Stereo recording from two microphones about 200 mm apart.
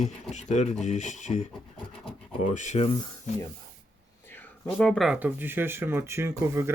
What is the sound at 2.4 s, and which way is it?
Speech, 35° left (ahead or behind).